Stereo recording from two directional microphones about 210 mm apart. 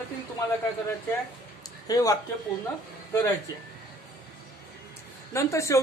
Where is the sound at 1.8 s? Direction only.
15° left (ahead or behind).